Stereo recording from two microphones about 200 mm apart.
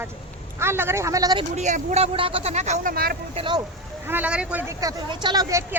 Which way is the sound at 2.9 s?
50° right (ahead or behind).